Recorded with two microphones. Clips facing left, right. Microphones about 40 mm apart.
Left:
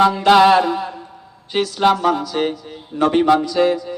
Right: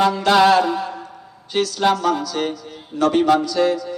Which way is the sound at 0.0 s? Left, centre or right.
Left.